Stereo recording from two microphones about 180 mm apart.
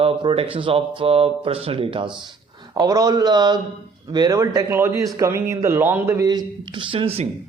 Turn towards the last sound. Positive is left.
turn(degrees=-30)  # may be behind; listen again after turning